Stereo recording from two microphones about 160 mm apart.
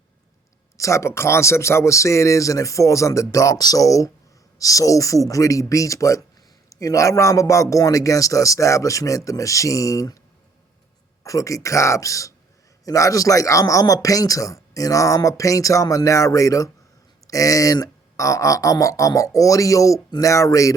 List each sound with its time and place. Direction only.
0.8 s a man's voice: 20° left (ahead or behind)
11.2 s a man's voice: 20° left (ahead or behind)